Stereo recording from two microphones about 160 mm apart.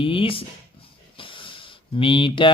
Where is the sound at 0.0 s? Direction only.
35° left (ahead or behind).